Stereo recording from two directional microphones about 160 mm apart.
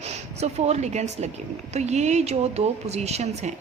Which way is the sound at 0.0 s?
40° right (ahead or behind).